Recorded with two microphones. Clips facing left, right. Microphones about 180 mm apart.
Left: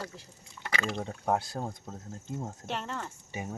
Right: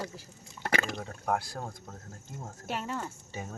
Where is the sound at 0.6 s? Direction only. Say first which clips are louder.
Right 3 dB; 40° right (ahead or behind).